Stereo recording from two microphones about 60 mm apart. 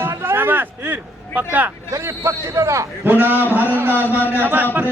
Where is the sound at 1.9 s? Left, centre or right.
Right.